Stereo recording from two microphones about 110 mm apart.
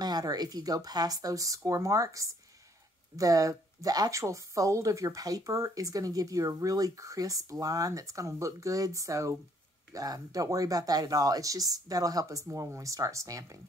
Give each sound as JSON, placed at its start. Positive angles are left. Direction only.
{"t": 0.0, "sound": "speech", "side_deg": -35}